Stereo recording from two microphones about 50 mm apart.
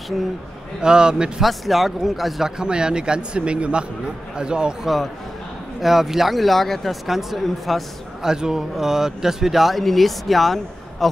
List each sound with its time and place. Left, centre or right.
0.8 s speech: centre
1.4 s speech: centre
2.6 s speech: centre
4.8 s speech: centre
8.3 s speech: centre